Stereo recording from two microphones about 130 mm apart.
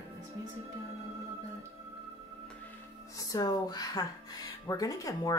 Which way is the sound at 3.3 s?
30° left (ahead or behind).